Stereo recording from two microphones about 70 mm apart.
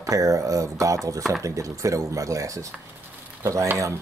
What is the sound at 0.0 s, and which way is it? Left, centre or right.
Speech, right.